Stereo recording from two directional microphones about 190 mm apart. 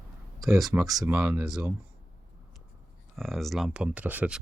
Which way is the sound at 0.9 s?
10° right (ahead or behind).